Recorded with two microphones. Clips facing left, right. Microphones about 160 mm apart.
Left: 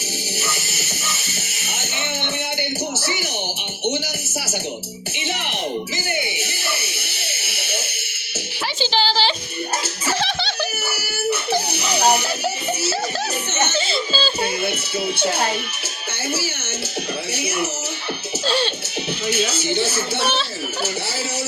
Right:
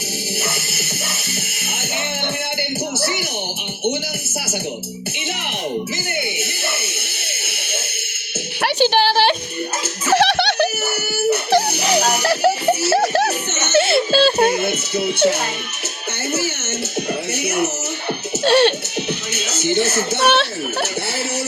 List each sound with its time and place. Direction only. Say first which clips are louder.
8.6 s speech: right 6 dB; 60° right (ahead or behind)
10.1 s music: right 9 dB; 70° right (ahead or behind)
18.4 s music: right 8 dB; 65° right (ahead or behind)
19.8 s speech: right 4 dB; 70° right (ahead or behind)